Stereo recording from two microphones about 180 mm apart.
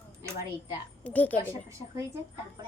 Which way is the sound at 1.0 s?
10° left (ahead or behind).